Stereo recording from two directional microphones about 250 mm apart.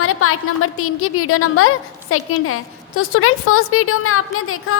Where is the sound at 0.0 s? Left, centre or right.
Left.